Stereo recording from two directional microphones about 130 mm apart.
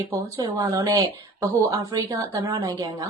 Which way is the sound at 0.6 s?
25° right (ahead or behind).